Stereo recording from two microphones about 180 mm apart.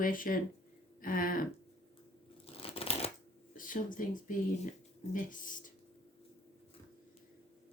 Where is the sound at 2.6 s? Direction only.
30° left (ahead or behind).